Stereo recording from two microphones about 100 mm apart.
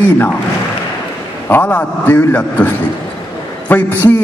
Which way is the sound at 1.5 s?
15° left (ahead or behind).